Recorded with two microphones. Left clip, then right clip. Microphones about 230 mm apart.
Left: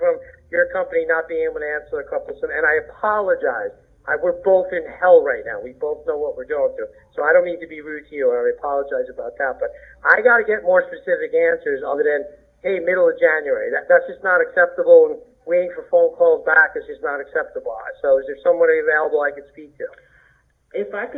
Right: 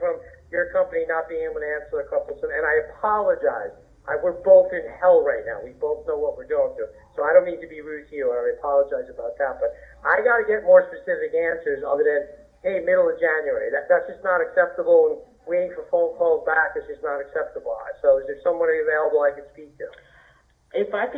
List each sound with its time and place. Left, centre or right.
0.0 s speech: left
20.7 s speech: centre